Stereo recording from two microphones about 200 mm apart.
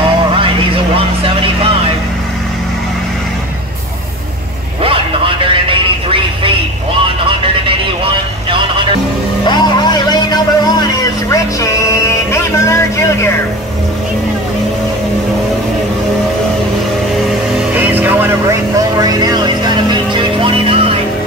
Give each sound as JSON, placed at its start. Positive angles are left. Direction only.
{"t": 0.9, "sound": "vehicle", "side_deg": -30}
{"t": 4.8, "sound": "music", "side_deg": -25}
{"t": 7.2, "sound": "vehicle", "side_deg": -25}
{"t": 9.4, "sound": "vehicle", "side_deg": 20}
{"t": 12.3, "sound": "music", "side_deg": 15}
{"t": 17.7, "sound": "music", "side_deg": -10}